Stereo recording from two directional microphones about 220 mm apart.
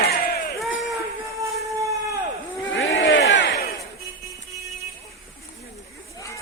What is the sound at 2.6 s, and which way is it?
Battle cry, 60° left (ahead or behind).